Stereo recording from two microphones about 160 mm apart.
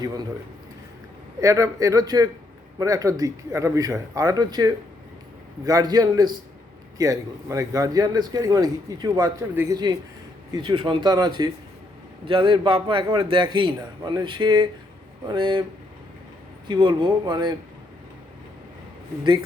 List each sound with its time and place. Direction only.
1.4 s a man's voice: 20° right (ahead or behind)
16.6 s a man's voice: 30° right (ahead or behind)